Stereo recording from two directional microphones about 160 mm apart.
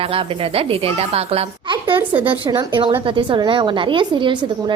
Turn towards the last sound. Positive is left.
turn(degrees=-30)  # may be behind; listen again after turning